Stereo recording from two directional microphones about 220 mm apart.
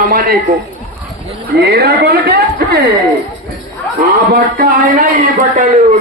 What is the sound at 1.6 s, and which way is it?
A woman's voice, 45° right (ahead or behind).